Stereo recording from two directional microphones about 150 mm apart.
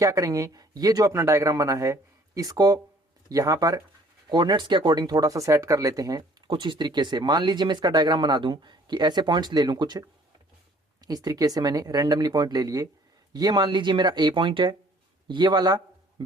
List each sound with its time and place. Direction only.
0.0 s a man's voice: 20° right (ahead or behind)